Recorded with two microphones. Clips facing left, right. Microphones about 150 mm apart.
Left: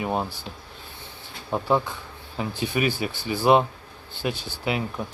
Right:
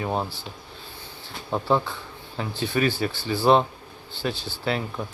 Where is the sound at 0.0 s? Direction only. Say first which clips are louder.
Even; 5° left (ahead or behind).